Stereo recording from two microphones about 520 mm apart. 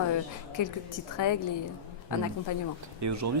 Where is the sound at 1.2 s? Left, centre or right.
Left.